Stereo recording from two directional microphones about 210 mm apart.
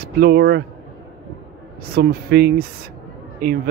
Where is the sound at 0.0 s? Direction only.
45° right (ahead or behind).